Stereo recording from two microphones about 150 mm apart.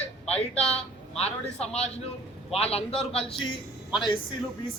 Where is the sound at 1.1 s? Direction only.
45° left (ahead or behind).